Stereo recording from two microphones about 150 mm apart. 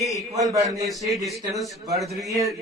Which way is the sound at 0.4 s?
20° right (ahead or behind).